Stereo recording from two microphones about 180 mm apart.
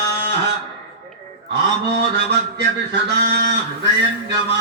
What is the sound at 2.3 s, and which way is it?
A man's voice, 70° right (ahead or behind).